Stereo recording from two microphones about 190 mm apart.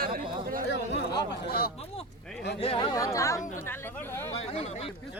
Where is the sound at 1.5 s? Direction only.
55° left (ahead or behind).